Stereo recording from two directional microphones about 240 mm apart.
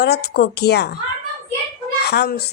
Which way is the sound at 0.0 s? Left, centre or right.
Left.